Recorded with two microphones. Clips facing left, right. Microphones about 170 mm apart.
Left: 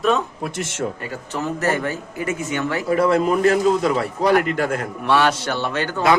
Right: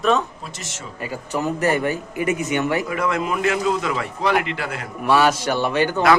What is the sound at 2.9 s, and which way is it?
A man's voice, 35° left (ahead or behind).